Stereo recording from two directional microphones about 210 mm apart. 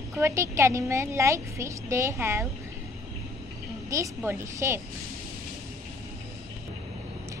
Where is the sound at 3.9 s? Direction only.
15° right (ahead or behind).